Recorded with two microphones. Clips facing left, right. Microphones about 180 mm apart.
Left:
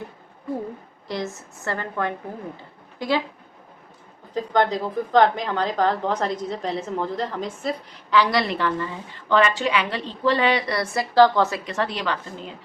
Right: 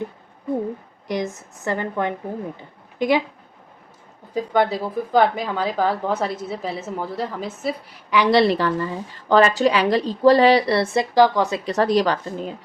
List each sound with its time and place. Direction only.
1.0 s a woman's voice: 15° right (ahead or behind)
4.4 s a woman's voice: 10° right (ahead or behind)
8.3 s a woman's voice: 30° right (ahead or behind)
11.1 s a woman's voice: 15° right (ahead or behind)
11.6 s a woman's voice: 40° right (ahead or behind)